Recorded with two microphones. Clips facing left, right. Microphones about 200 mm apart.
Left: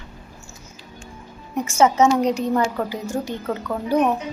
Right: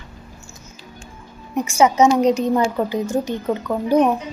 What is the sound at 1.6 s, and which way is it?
A woman's voice, 10° right (ahead or behind).